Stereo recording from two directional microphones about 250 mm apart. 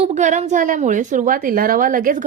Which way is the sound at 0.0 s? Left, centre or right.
Right.